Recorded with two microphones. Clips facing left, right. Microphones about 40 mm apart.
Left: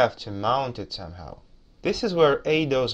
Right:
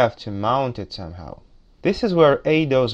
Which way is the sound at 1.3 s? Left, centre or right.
Centre.